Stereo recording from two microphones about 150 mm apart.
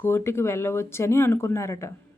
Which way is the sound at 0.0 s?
15° left (ahead or behind).